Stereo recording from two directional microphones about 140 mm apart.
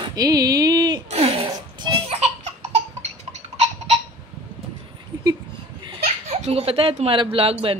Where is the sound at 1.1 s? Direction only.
45° right (ahead or behind).